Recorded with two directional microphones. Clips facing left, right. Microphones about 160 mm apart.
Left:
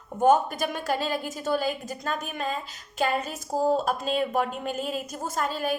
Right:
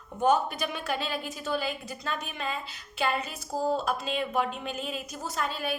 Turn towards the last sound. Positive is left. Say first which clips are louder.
# left 4 dB
turn(degrees=45)  # may be behind; listen again after turning